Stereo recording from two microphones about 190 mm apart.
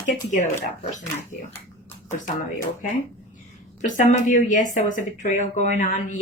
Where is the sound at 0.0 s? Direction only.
40° left (ahead or behind).